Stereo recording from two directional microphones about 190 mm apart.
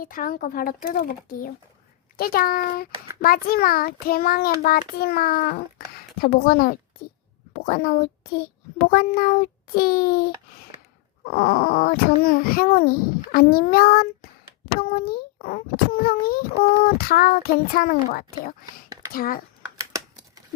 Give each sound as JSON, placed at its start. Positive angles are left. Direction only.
{"t": 0.0, "sound": "a child's voice", "side_deg": 50}